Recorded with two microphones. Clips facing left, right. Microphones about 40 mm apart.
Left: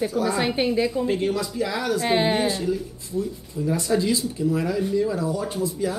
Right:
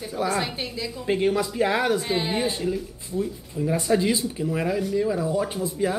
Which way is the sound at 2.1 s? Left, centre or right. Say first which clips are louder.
Left 4 dB; left.